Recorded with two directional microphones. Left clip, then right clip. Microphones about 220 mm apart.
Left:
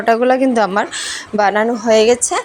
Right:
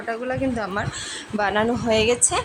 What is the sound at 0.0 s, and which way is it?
A woman's voice, 35° left (ahead or behind).